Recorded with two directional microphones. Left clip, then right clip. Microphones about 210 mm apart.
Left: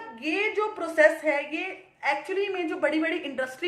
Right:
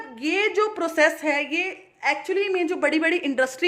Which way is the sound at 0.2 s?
50° right (ahead or behind).